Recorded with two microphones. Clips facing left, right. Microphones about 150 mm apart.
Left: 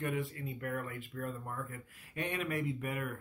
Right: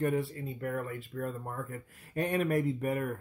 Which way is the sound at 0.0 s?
35° right (ahead or behind).